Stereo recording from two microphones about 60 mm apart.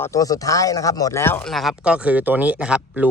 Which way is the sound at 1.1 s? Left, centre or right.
Left.